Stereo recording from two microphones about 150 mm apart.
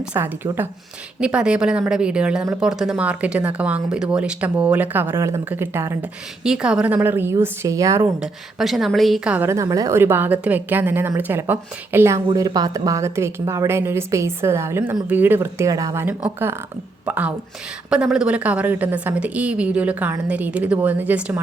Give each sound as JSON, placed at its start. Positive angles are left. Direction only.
{"t": 0.0, "sound": "a woman's voice", "side_deg": -10}
{"t": 6.4, "sound": "a woman's voice", "side_deg": -5}
{"t": 8.2, "sound": "a woman's voice", "side_deg": 0}
{"t": 12.3, "sound": "a woman's voice", "side_deg": -25}